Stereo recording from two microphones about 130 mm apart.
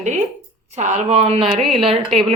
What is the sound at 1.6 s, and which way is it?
Speech, centre (ahead or behind).